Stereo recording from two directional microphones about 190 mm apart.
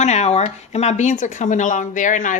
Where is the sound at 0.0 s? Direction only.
35° left (ahead or behind).